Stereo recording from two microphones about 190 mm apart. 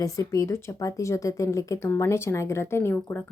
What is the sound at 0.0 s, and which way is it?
A woman's voice, 15° left (ahead or behind).